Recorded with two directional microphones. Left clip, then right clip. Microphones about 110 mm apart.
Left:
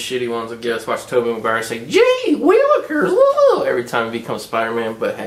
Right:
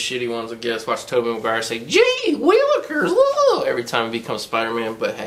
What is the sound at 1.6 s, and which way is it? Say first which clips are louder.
Speech: left 1 dB; 25° right (ahead or behind).